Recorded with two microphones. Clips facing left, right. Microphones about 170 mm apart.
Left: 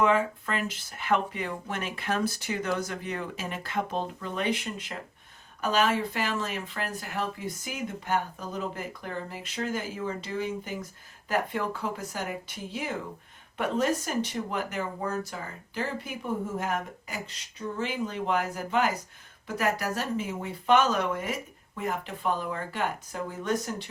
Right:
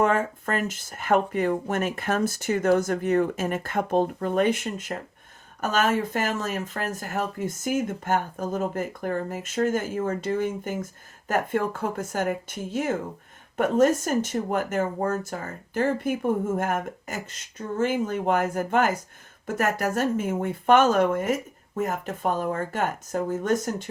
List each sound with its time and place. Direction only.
0.0 s speech: 45° right (ahead or behind)